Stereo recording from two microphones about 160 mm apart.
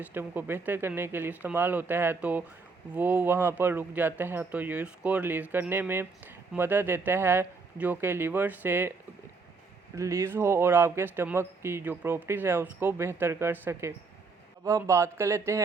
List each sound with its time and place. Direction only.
0.0 s speech: 10° right (ahead or behind)
9.9 s speech: 20° right (ahead or behind)